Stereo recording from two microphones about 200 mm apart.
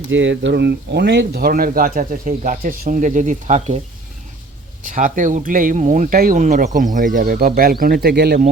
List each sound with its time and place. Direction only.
0.1 s speech: 65° right (ahead or behind); by 3.8 s 35° right (ahead or behind)
4.9 s speech: 40° right (ahead or behind)